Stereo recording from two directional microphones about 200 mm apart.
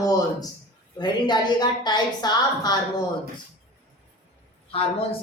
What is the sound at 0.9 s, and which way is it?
A woman's voice, 20° left (ahead or behind).